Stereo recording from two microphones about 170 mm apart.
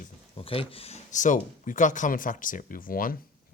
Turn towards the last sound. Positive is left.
turn(degrees=55)  # may be behind; listen again after turning